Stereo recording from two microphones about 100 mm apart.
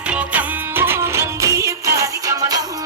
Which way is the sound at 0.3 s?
20° right (ahead or behind).